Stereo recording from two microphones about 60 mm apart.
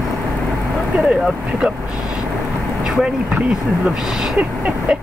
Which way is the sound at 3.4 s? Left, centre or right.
Centre.